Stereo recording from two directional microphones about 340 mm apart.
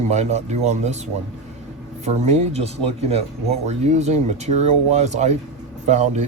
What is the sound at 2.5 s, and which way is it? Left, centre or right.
Speech, centre.